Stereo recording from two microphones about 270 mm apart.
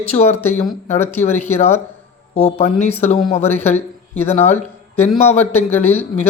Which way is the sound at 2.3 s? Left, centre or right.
Left.